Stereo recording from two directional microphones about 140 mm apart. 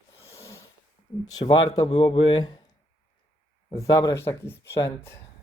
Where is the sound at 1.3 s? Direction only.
30° left (ahead or behind).